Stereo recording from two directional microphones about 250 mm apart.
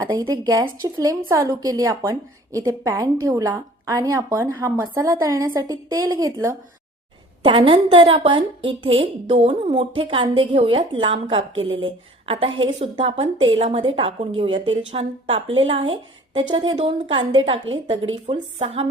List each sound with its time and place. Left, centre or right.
0.0 s a woman's voice: centre